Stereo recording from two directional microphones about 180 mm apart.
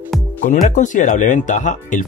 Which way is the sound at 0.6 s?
45° left (ahead or behind).